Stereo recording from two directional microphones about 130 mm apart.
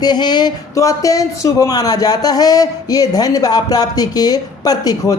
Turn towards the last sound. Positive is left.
turn(degrees=30)  # may be behind; listen again after turning